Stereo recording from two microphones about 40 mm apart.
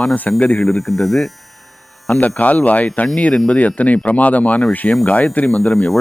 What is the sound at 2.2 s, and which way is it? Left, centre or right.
Speech, left.